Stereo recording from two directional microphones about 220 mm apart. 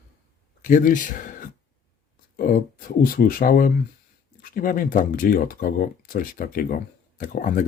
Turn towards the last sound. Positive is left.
turn(degrees=35)  # may be behind; listen again after turning